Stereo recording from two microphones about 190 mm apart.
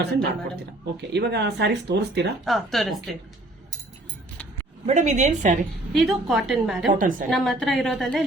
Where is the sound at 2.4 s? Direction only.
Centre (ahead or behind).